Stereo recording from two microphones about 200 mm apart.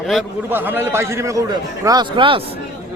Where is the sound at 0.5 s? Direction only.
10° right (ahead or behind).